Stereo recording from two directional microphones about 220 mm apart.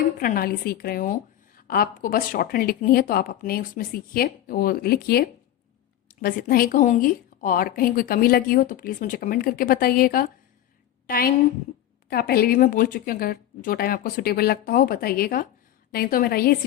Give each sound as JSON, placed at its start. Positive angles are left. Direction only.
{"t": 0.2, "sound": "a woman's voice", "side_deg": 40}
{"t": 11.0, "sound": "a sound", "side_deg": 45}
{"t": 12.0, "sound": "speech", "side_deg": 45}